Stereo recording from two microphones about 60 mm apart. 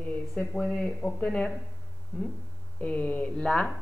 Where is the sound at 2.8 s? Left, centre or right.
Left.